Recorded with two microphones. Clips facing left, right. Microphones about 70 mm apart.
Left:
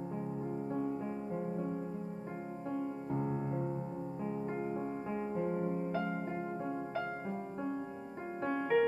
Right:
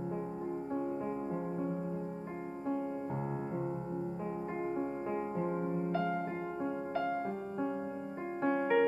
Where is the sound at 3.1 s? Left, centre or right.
Centre.